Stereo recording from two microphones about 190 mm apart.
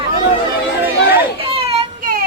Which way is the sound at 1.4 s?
30° right (ahead or behind).